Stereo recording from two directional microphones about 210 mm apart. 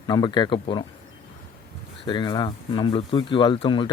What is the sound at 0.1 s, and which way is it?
Speech, 20° left (ahead or behind).